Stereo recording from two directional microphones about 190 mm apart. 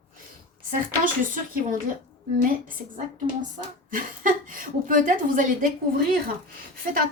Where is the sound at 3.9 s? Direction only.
45° right (ahead or behind).